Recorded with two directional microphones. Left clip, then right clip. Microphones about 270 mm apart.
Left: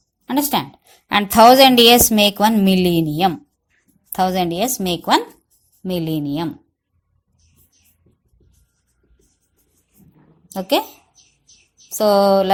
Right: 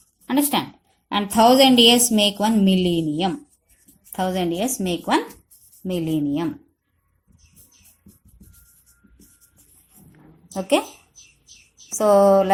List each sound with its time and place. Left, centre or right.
0.3 s a woman's voice: left
10.5 s a woman's voice: left
11.9 s a woman's voice: left